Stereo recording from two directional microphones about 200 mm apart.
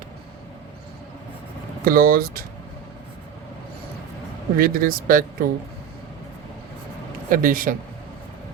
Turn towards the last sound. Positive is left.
turn(degrees=-45)  # may be behind; listen again after turning